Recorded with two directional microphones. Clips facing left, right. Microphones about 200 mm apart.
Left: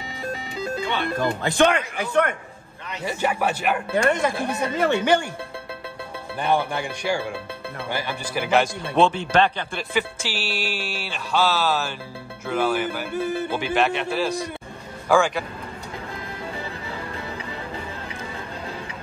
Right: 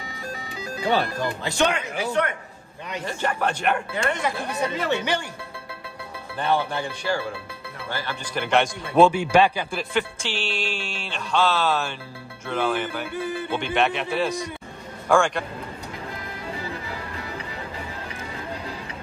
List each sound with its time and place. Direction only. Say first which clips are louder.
0.2 s music: left 6 dB; 25° left (ahead or behind)
1.4 s a man's voice: left 4 dB; 50° left (ahead or behind)
3.0 s speech: left 2 dB; 10° left (ahead or behind)
3.9 s a man's voice: left 5 dB; 45° left (ahead or behind)
6.3 s speech: left 1 dB; 15° left (ahead or behind); by 9.8 s 10° right (ahead or behind)
9.9 s speech: left 1 dB; 5° left (ahead or behind)